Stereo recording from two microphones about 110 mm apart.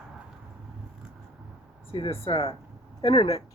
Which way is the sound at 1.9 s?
55° left (ahead or behind).